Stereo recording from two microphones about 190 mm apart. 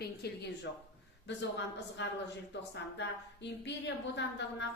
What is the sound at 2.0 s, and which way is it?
A woman's voice, 70° left (ahead or behind).